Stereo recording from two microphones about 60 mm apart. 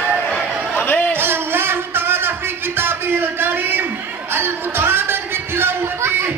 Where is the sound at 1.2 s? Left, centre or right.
Right.